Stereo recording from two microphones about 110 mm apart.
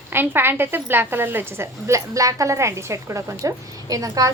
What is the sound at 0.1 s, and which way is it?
A woman's voice, 20° right (ahead or behind).